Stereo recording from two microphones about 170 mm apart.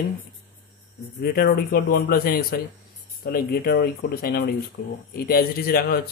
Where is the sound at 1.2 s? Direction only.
55° left (ahead or behind).